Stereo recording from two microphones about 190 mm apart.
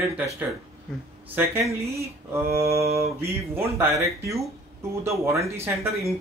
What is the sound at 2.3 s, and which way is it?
Speech, 15° right (ahead or behind).